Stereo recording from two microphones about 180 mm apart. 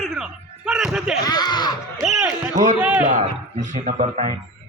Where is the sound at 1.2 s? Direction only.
20° left (ahead or behind).